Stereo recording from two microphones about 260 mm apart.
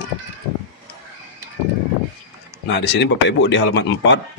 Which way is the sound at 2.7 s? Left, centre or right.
Left.